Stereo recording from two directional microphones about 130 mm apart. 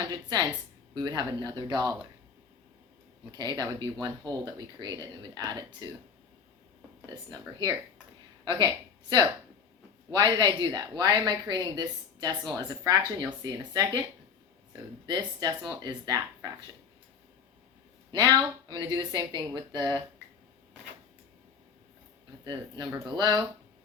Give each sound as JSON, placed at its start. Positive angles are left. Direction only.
{"t": 0.0, "sound": "speech", "side_deg": -35}
{"t": 3.3, "sound": "speech", "side_deg": -30}
{"t": 7.1, "sound": "speech", "side_deg": -30}
{"t": 15.0, "sound": "speech", "side_deg": -35}
{"t": 18.1, "sound": "speech", "side_deg": -30}
{"t": 22.4, "sound": "speech", "side_deg": -35}